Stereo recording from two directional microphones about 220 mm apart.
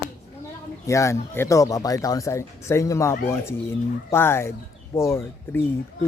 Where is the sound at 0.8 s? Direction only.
15° left (ahead or behind).